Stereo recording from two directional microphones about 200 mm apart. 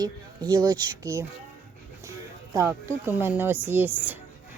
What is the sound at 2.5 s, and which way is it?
A woman's voice, 15° right (ahead or behind).